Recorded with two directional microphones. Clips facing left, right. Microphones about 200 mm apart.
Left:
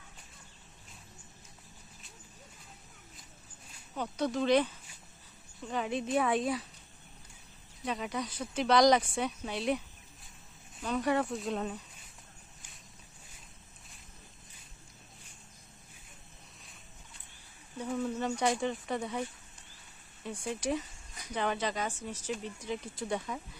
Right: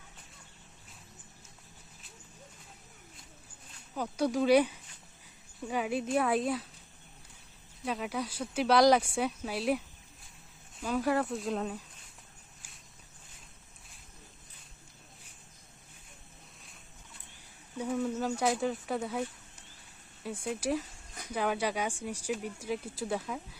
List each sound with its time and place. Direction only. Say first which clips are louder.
3.9 s speech: right 2 dB; 10° right (ahead or behind)
7.9 s speech: right 1 dB; 5° right (ahead or behind)
17.7 s speech: right 2 dB; 5° right (ahead or behind)
20.2 s speech: right 1 dB; 5° right (ahead or behind)